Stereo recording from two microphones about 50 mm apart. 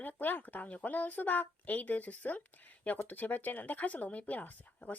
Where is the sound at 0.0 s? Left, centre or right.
Left.